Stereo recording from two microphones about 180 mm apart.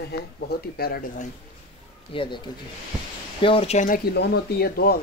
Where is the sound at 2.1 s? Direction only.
25° left (ahead or behind); by 4.0 s 45° left (ahead or behind).